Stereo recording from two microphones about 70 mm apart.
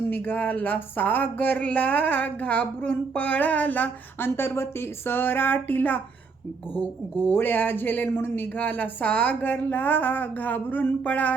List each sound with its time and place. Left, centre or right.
0.1 s speech: left
7.3 s speech: left